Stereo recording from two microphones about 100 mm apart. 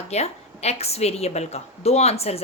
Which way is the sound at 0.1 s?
90° left.